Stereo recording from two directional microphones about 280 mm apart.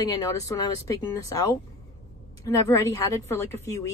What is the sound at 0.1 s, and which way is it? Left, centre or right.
A woman's voice, centre.